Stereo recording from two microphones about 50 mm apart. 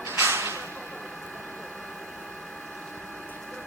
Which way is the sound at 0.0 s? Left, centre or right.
Right.